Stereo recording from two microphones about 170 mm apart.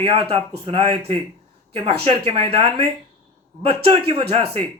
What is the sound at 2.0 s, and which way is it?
Speech, 30° right (ahead or behind).